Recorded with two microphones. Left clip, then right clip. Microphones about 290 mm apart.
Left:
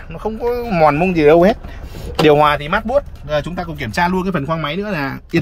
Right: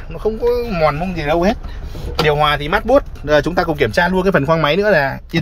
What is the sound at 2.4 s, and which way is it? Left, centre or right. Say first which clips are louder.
Speech: left 2 dB; centre.